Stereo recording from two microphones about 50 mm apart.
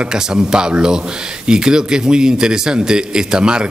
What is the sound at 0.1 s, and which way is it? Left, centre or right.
A man's voice, centre.